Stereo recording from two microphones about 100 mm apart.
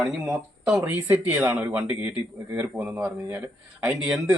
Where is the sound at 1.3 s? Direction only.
30° right (ahead or behind).